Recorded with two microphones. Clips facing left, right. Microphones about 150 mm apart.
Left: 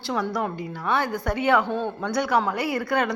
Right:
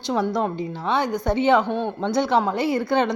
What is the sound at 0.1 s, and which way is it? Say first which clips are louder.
A woman's voice: right 4 dB; 20° right (ahead or behind).